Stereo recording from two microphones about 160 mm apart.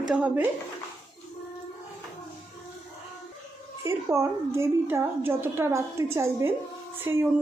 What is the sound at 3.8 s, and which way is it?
A woman's voice, 15° right (ahead or behind).